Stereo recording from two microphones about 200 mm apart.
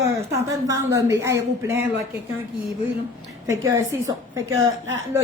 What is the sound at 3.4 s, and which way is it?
Speech, 15° right (ahead or behind).